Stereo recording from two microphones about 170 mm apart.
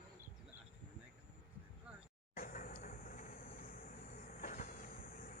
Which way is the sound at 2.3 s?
55° left (ahead or behind).